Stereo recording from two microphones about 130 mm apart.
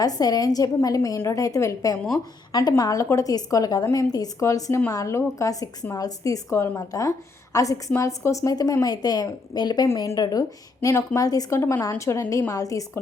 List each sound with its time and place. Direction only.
0.0 s a woman's voice: 30° left (ahead or behind)